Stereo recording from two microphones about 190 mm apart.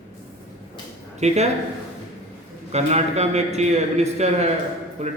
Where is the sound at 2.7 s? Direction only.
35° right (ahead or behind).